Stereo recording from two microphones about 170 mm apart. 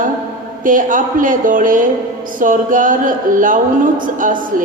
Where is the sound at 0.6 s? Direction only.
50° right (ahead or behind).